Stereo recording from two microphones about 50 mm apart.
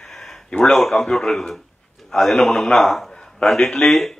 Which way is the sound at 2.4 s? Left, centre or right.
Centre.